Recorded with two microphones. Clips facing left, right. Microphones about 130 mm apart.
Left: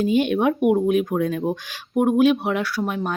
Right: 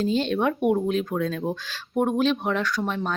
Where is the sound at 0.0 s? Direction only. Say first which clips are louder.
Left 4 dB; 15° left (ahead or behind).